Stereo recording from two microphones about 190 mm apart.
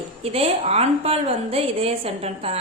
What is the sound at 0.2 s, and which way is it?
A woman's voice, 30° right (ahead or behind).